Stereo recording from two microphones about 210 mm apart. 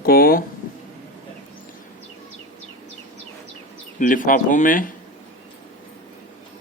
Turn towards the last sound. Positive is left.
turn(degrees=40)  # may be behind; listen again after turning